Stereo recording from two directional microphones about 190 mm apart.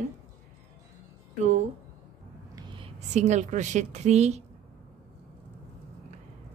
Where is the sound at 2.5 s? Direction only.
25° right (ahead or behind).